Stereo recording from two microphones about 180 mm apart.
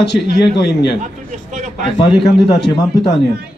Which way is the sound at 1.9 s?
25° left (ahead or behind).